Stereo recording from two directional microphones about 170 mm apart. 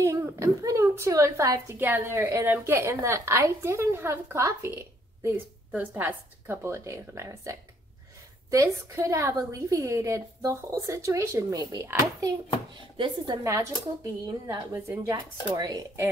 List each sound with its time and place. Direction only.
0.0 s a woman's voice: 15° right (ahead or behind)